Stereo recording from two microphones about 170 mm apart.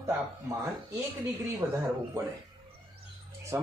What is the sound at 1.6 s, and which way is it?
Speech, 15° right (ahead or behind).